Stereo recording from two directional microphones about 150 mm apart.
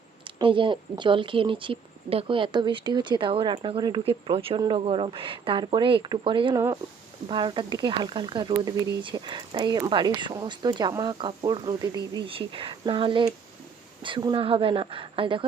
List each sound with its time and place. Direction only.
0.3 s speech: 35° right (ahead or behind)